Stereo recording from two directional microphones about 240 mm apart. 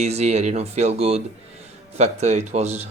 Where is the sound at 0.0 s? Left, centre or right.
Right.